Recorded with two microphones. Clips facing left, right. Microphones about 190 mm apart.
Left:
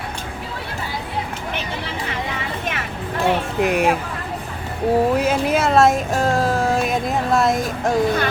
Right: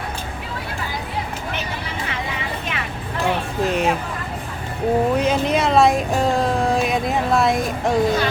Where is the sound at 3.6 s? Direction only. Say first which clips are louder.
Left 2 dB; 15° left (ahead or behind).